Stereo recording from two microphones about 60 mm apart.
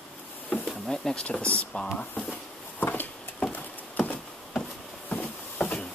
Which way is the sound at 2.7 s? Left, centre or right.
Left.